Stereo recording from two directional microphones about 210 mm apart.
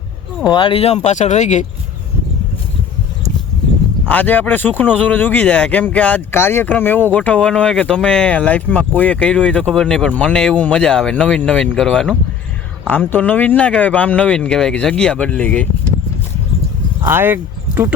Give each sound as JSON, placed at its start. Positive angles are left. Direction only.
{"t": 0.4, "sound": "speech", "side_deg": 25}
{"t": 4.1, "sound": "speech", "side_deg": 10}
{"t": 17.0, "sound": "speech", "side_deg": -10}